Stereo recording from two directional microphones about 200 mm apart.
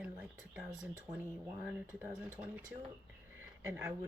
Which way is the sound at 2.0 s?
10° right (ahead or behind).